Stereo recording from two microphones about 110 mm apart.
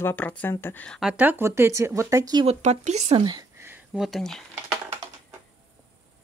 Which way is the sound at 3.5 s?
20° right (ahead or behind).